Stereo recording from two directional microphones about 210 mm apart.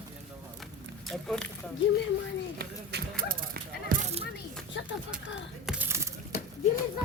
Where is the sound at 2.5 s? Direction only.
45° right (ahead or behind).